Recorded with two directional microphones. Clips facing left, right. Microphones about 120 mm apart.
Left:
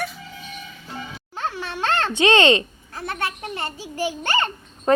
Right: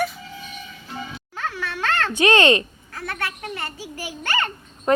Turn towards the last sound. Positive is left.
turn(degrees=25)  # may be behind; listen again after turning